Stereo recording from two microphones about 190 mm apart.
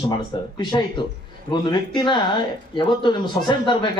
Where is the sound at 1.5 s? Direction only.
25° left (ahead or behind).